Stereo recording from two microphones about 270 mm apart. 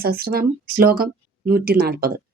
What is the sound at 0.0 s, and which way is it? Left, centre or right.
A woman's voice, right.